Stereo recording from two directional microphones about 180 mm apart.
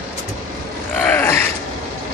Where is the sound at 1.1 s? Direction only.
10° left (ahead or behind).